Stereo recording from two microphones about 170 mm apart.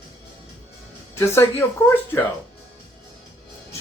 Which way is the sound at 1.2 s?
15° left (ahead or behind).